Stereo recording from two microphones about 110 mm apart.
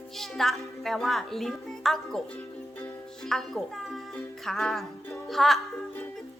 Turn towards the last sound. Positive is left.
turn(degrees=0)  # may be behind; listen again after turning